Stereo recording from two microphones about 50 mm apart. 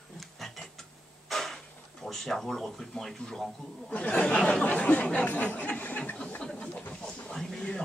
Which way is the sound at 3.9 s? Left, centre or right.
Left.